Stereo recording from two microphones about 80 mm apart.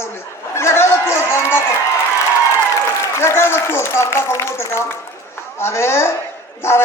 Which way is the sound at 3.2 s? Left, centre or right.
Left.